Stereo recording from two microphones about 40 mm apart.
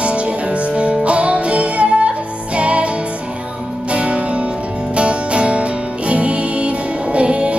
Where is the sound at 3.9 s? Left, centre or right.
Right.